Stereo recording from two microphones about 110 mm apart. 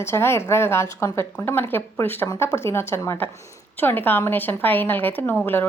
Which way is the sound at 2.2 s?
35° left (ahead or behind).